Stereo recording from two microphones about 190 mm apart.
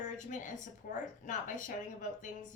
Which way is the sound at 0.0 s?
40° left (ahead or behind).